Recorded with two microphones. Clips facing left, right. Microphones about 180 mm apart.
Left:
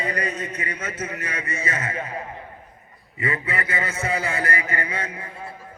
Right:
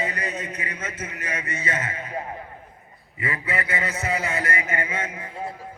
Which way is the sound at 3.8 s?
30° left (ahead or behind).